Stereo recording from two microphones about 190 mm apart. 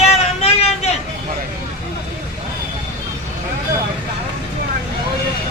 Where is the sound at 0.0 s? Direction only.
35° left (ahead or behind).